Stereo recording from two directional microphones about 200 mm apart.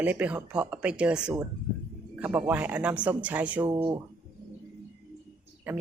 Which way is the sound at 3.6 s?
30° right (ahead or behind).